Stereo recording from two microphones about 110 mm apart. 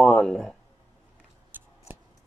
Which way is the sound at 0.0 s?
5° left (ahead or behind).